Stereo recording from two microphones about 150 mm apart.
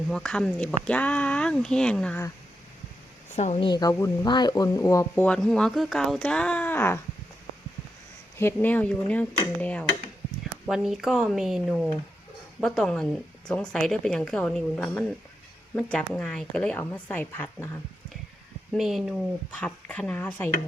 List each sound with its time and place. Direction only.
0.1 s speech: 5° left (ahead or behind)
3.3 s speech: 50° left (ahead or behind)
3.6 s speech: 30° left (ahead or behind)
5.2 s speech: 5° left (ahead or behind)
8.5 s speech: 10° left (ahead or behind)
10.7 s speech: centre (ahead or behind)
18.7 s speech: centre (ahead or behind)